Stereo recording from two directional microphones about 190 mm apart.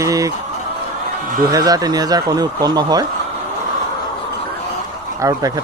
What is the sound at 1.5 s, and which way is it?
Speech, 20° right (ahead or behind).